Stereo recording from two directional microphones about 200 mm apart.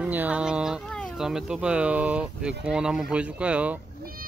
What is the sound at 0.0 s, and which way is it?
Speech, 10° right (ahead or behind).